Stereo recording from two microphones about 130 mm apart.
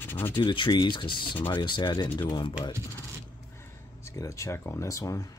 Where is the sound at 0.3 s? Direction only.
40° left (ahead or behind).